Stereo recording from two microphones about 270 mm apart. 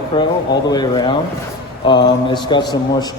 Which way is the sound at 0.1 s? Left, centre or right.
Centre.